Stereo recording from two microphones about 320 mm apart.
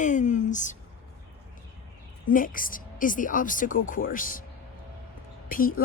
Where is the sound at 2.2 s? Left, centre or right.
Left.